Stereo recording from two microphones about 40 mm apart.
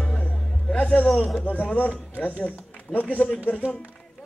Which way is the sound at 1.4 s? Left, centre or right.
Left.